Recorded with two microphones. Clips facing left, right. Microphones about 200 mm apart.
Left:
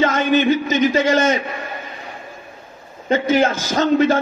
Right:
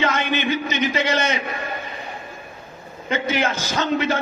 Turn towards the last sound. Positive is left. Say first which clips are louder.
# left 6 dB
turn(degrees=45)  # may be behind; listen again after turning